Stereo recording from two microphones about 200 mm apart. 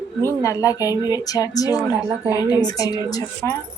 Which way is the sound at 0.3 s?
15° left (ahead or behind).